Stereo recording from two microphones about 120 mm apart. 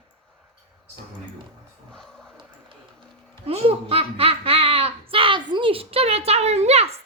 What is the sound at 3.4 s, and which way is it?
Speech, 55° right (ahead or behind).